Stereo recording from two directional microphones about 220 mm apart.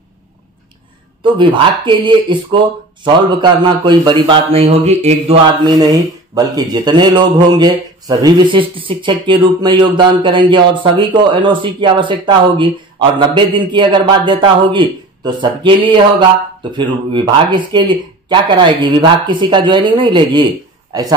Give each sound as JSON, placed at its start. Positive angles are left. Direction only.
{"t": 1.2, "sound": "speech", "side_deg": -20}
{"t": 5.6, "sound": "speech", "side_deg": -15}